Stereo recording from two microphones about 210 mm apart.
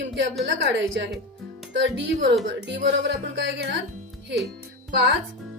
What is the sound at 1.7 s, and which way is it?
A woman's voice, 60° right (ahead or behind).